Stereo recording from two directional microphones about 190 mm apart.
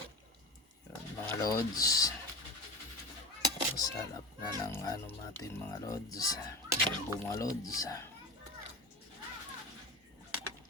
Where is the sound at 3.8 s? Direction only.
20° left (ahead or behind).